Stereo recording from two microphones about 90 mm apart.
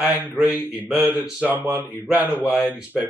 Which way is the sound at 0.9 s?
20° right (ahead or behind).